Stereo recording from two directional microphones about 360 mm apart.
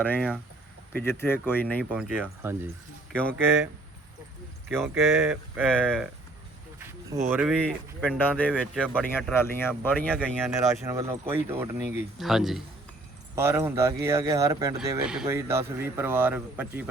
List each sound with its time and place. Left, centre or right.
0.0 s speech: centre
4.7 s speech: centre
7.1 s speech: centre
10.6 s speech: centre
12.1 s speech: centre